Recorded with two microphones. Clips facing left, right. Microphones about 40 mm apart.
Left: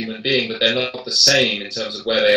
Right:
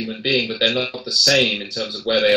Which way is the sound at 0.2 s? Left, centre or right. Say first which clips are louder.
Left 1 dB; centre.